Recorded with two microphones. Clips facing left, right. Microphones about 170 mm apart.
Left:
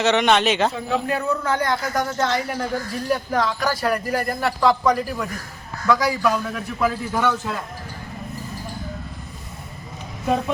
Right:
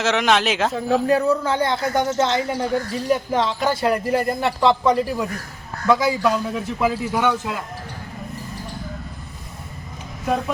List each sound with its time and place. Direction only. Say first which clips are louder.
0.0 s speech: left 1 dB; centre (ahead or behind)
1.0 s speech: right 5 dB; 35° right (ahead or behind); by 7.6 s 10° right (ahead or behind)